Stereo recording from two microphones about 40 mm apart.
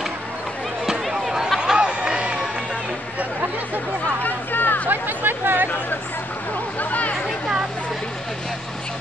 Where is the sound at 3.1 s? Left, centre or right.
Right.